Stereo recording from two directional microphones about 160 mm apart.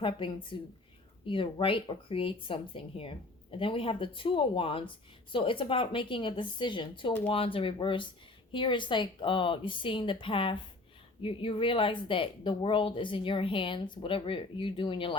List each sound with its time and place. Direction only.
0.0 s speech: 30° left (ahead or behind)